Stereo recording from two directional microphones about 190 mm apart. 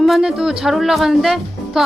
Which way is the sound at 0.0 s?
Centre (ahead or behind).